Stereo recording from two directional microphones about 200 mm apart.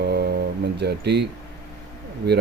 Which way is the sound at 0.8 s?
55° right (ahead or behind).